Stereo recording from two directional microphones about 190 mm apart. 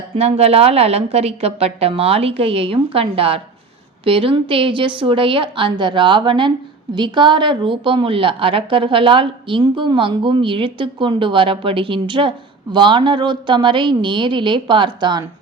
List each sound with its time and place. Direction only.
0.2 s a woman's voice: 35° right (ahead or behind)